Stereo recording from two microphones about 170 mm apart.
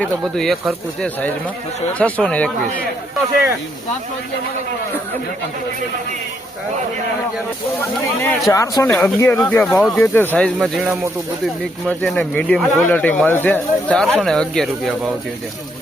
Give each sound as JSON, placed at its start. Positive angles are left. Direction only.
{"t": 0.0, "sound": "speech", "side_deg": 0}
{"t": 1.9, "sound": "speech", "side_deg": 10}
{"t": 8.4, "sound": "speech", "side_deg": 20}
{"t": 8.9, "sound": "speech", "side_deg": 10}
{"t": 10.6, "sound": "speech", "side_deg": -10}
{"t": 11.9, "sound": "speech", "side_deg": 5}